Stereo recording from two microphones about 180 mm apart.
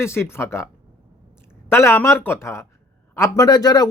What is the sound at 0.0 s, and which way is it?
Speech, 15° left (ahead or behind).